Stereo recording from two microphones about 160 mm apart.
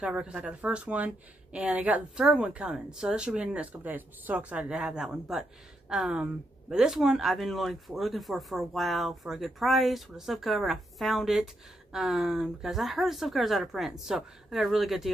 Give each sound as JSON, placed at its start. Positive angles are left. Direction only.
{"t": 0.0, "sound": "speech", "side_deg": -5}